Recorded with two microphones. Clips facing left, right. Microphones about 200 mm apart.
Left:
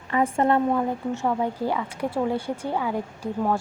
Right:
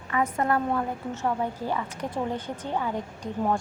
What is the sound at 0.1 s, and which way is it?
Speech, 30° left (ahead or behind).